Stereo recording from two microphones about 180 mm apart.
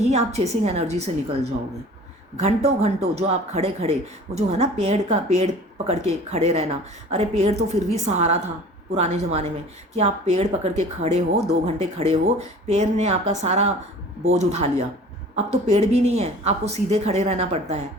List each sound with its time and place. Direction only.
0.0 s speech: 40° right (ahead or behind)
2.4 s speech: 35° right (ahead or behind)